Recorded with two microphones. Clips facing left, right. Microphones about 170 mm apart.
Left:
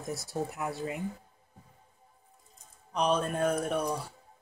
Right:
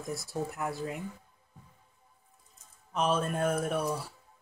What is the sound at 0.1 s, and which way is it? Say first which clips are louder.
Speech: left 1 dB; centre (ahead or behind).